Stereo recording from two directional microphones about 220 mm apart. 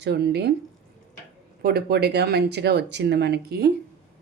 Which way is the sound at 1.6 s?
45° right (ahead or behind).